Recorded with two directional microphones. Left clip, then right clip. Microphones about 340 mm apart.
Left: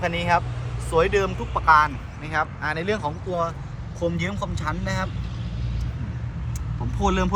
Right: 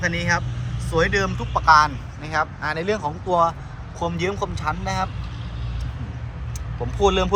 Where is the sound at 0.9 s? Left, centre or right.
Centre.